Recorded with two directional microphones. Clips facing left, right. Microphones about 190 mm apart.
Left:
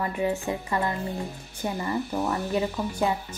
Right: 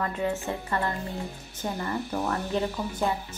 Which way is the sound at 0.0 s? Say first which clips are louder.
Left 2 dB; 10° left (ahead or behind).